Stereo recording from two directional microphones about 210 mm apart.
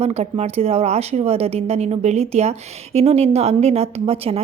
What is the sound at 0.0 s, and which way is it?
Speech, 30° right (ahead or behind).